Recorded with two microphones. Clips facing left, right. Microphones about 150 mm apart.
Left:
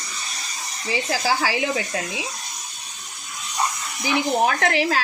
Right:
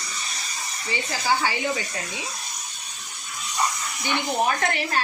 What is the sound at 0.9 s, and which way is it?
Speech, 90° left.